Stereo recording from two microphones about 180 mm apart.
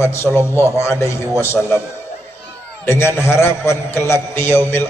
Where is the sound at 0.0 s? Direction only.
15° left (ahead or behind).